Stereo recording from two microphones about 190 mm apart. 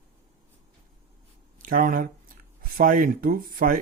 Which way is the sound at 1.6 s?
45° right (ahead or behind).